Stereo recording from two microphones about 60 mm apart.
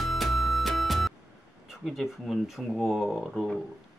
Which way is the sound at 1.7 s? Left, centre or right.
Centre.